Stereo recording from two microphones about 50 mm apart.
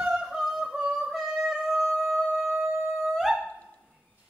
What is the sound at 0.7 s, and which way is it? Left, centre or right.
Yodeling, right.